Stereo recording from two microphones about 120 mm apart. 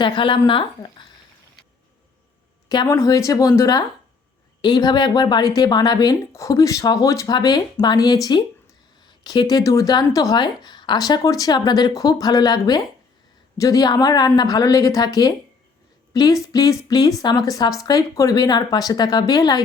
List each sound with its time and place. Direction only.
0.0 s a woman's voice: 45° left (ahead or behind)
2.6 s a woman's voice: 30° left (ahead or behind)